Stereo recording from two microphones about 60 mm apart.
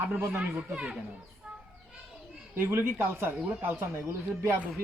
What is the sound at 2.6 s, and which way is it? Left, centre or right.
Speech, right.